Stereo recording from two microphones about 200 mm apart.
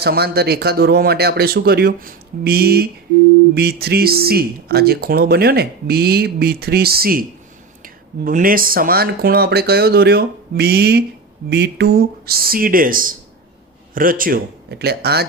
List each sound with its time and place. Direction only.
0.0 s speech: 55° right (ahead or behind)